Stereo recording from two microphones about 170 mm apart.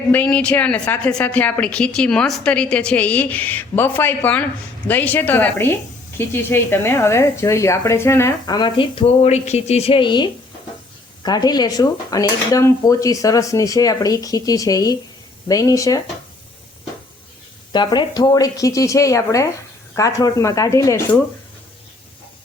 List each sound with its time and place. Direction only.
0.1 s a woman's voice: 10° left (ahead or behind)
17.7 s speech: 25° left (ahead or behind)